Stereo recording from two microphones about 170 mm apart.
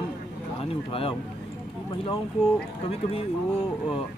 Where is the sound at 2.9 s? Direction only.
35° left (ahead or behind).